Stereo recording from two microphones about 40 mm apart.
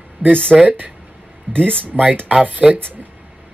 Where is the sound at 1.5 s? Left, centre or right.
Left.